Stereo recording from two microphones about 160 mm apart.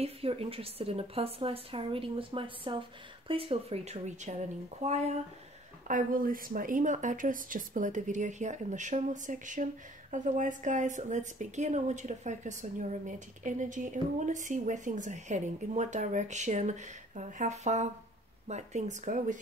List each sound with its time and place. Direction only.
0.0 s a woman's voice: 35° right (ahead or behind)
5.9 s a woman's voice: 55° right (ahead or behind)